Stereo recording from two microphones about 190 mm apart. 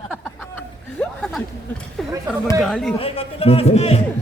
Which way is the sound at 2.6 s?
Centre (ahead or behind).